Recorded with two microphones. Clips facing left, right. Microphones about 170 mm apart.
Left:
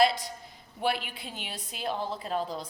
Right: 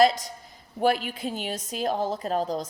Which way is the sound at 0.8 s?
45° right (ahead or behind).